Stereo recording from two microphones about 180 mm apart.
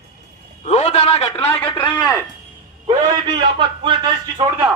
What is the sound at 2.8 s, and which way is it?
A man's voice, 25° right (ahead or behind).